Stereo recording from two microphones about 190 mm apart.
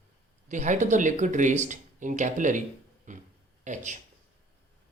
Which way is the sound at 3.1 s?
40° right (ahead or behind).